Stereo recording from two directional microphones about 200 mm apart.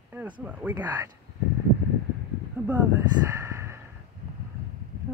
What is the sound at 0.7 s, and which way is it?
Speech, 20° right (ahead or behind).